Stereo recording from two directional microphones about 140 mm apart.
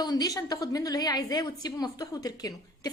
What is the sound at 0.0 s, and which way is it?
A woman's voice, 30° left (ahead or behind).